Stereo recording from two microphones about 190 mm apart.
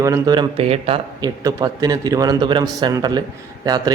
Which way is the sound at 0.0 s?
20° right (ahead or behind).